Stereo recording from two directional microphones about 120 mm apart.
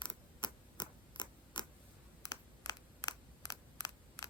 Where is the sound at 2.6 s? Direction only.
30° left (ahead or behind).